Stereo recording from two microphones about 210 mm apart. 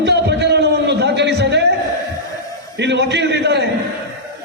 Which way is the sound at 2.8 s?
55° right (ahead or behind).